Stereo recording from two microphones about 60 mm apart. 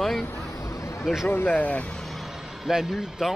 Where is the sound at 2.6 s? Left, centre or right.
Centre.